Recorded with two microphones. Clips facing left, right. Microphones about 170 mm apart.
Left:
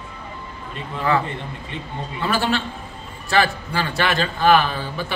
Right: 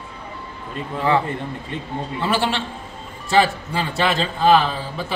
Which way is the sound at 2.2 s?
25° right (ahead or behind).